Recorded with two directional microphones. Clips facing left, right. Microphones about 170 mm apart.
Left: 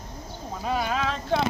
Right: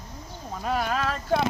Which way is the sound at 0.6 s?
Centre (ahead or behind).